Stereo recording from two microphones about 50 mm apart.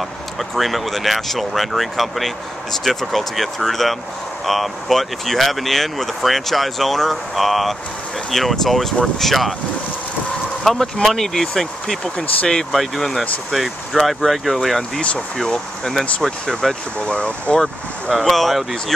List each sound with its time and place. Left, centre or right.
0.4 s speech: centre
10.6 s speech: centre
15.4 s speech: centre
15.9 s speech: centre
17.0 s speech: left
18.2 s speech: centre